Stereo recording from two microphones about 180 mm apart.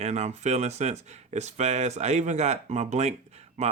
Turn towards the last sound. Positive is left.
turn(degrees=-40)  # may be behind; listen again after turning